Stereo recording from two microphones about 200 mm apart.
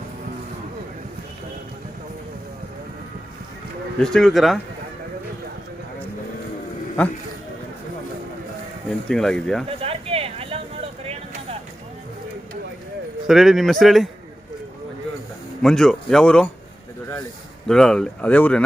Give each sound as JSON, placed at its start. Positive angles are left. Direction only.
{"t": 4.0, "sound": "speech", "side_deg": 0}
{"t": 9.0, "sound": "speech", "side_deg": 5}
{"t": 9.6, "sound": "a sound", "side_deg": -30}
{"t": 13.2, "sound": "speech", "side_deg": 0}
{"t": 15.6, "sound": "speech", "side_deg": 5}
{"t": 17.7, "sound": "speech", "side_deg": 5}